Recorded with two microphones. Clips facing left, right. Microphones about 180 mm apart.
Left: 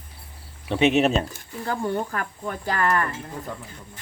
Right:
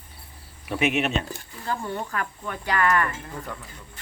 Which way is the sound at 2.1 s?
35° left (ahead or behind).